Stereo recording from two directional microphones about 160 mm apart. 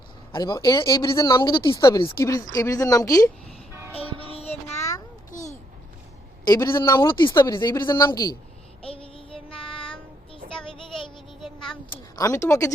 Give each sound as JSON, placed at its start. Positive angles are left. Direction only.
{"t": 0.3, "sound": "speech", "side_deg": 25}
{"t": 2.1, "sound": "speech", "side_deg": 20}
{"t": 4.8, "sound": "a sound", "side_deg": 20}
{"t": 5.3, "sound": "a sound", "side_deg": 50}
{"t": 6.4, "sound": "speech", "side_deg": 25}
{"t": 7.1, "sound": "speech", "side_deg": 30}
{"t": 8.8, "sound": "child singing", "side_deg": 35}
{"t": 9.6, "sound": "child singing", "side_deg": 5}
{"t": 10.7, "sound": "child singing", "side_deg": 30}
{"t": 12.1, "sound": "speech", "side_deg": 20}